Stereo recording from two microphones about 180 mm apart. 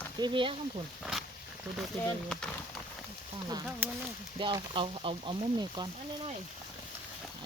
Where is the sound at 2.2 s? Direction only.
5° left (ahead or behind).